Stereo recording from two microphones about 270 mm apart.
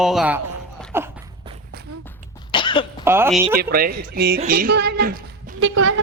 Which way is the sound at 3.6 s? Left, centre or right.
Right.